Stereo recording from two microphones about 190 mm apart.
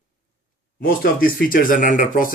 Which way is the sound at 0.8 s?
50° left (ahead or behind).